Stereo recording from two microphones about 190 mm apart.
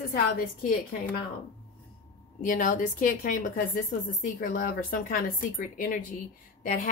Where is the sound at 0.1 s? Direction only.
45° left (ahead or behind).